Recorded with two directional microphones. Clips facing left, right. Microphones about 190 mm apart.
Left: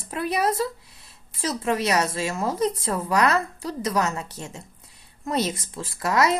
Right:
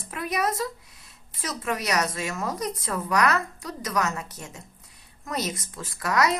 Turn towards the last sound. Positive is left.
turn(degrees=25)  # may be behind; listen again after turning